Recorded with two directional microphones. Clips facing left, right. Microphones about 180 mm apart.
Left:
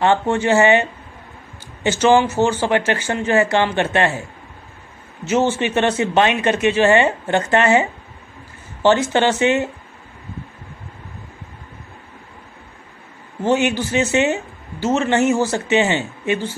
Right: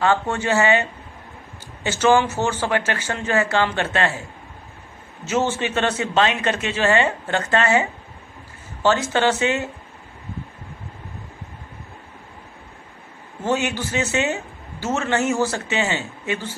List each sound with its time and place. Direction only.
0.0 s speech: 20° left (ahead or behind)
5.2 s speech: 15° left (ahead or behind)
9.1 s speech: 20° left (ahead or behind)
13.4 s speech: 20° left (ahead or behind)